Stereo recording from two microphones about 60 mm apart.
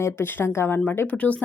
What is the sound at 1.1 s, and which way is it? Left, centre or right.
Speech, left.